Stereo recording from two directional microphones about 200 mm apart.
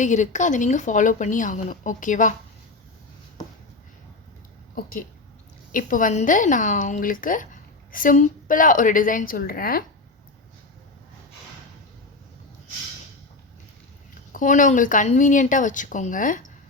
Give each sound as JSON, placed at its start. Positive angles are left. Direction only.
{"t": 0.0, "sound": "a woman's voice", "side_deg": 35}
{"t": 4.7, "sound": "a woman's voice", "side_deg": 45}
{"t": 14.3, "sound": "a woman's voice", "side_deg": 40}